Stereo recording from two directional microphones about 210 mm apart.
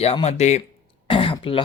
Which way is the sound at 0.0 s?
30° left (ahead or behind).